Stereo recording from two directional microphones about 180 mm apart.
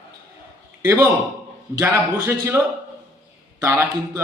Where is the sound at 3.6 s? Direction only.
15° right (ahead or behind).